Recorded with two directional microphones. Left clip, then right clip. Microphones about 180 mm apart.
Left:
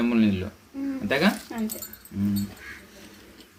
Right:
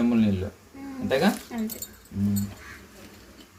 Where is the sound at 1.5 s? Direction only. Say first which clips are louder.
Left 1 dB; 55° left (ahead or behind).